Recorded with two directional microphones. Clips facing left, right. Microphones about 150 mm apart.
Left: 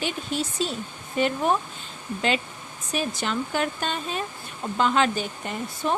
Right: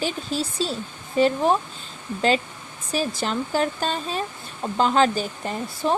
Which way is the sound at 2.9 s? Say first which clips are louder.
Right 2 dB; 30° right (ahead or behind).